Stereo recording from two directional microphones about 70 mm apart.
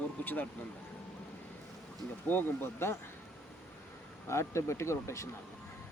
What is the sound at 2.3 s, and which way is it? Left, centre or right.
Speech, left.